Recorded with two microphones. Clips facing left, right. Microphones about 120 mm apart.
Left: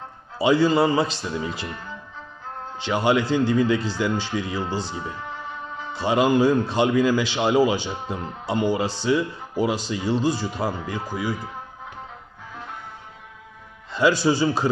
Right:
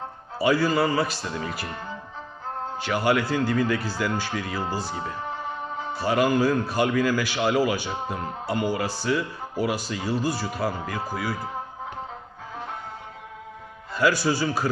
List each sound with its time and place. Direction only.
0.3 s a man's voice: 20° left (ahead or behind)
1.6 s speech: 30° right (ahead or behind)
2.8 s a man's voice: 20° left (ahead or behind)
5.2 s music: 35° right (ahead or behind)
5.9 s a man's voice: 20° left (ahead or behind)
13.9 s a man's voice: 25° left (ahead or behind)